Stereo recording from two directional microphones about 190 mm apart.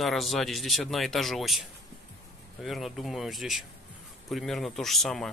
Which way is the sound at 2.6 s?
Centre (ahead or behind).